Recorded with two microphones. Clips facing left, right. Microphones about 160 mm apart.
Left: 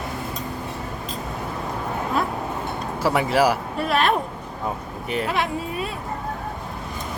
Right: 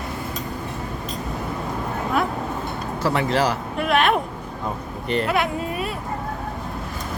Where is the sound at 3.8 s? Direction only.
35° left (ahead or behind).